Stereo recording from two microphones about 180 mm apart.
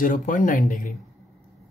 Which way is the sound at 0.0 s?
50° left (ahead or behind).